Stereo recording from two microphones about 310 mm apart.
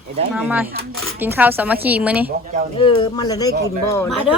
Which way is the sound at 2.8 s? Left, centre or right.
Centre.